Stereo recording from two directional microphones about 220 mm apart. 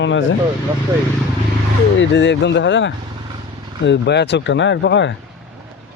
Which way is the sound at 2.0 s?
55° left (ahead or behind).